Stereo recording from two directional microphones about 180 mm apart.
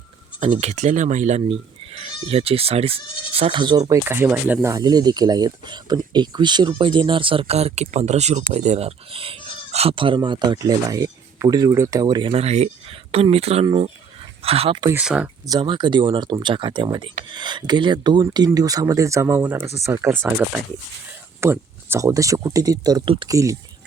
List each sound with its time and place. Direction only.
0.3 s speech: 30° right (ahead or behind)
14.9 s speech: 5° right (ahead or behind)
15.4 s speech: 25° right (ahead or behind)